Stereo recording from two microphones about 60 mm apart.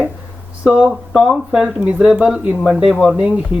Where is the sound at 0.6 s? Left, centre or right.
Centre.